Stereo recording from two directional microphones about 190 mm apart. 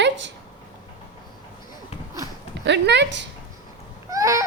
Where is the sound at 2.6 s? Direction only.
65° right (ahead or behind).